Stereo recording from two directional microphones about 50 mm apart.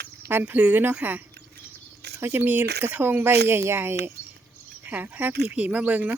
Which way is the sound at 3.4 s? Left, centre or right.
Right.